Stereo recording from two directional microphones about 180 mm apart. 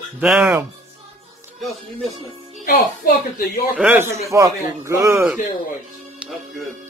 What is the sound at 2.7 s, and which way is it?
A woman's voice, 55° left (ahead or behind).